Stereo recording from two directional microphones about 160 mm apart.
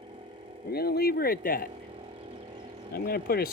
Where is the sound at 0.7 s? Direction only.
80° left.